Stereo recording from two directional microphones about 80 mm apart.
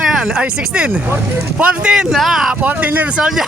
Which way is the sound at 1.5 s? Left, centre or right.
Centre.